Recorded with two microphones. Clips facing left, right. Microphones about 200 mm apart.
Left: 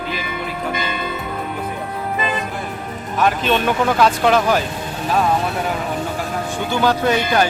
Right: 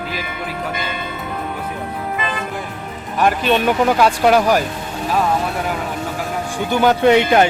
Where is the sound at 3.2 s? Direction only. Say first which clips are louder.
Right 2 dB; 10° right (ahead or behind).